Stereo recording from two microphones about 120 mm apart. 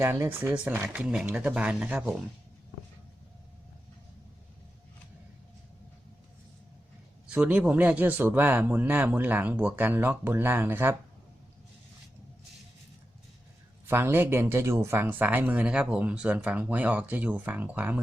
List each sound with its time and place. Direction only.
0.0 s speech: 20° right (ahead or behind)
7.3 s speech: 10° right (ahead or behind)
13.8 s speech: 20° right (ahead or behind)